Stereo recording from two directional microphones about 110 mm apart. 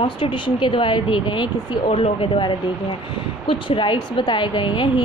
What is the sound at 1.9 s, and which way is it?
A woman's voice, 60° left (ahead or behind).